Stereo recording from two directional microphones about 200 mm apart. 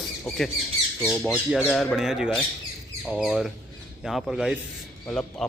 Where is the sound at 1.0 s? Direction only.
5° right (ahead or behind).